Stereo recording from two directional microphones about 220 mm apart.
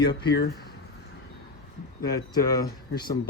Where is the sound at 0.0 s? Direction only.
50° left (ahead or behind).